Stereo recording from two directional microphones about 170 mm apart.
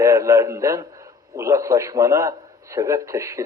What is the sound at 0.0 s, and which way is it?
A man's voice, 20° right (ahead or behind).